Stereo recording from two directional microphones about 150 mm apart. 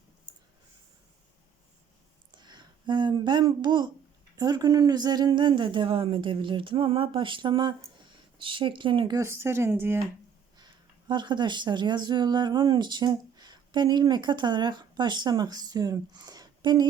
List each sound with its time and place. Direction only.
2.3 s speech: 30° right (ahead or behind)
9.1 s speech: 15° right (ahead or behind)
11.1 s speech: 30° right (ahead or behind)